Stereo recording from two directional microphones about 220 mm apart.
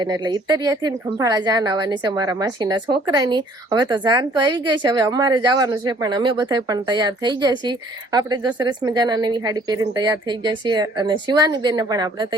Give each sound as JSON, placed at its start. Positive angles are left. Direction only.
{"t": 0.0, "sound": "speech", "side_deg": -20}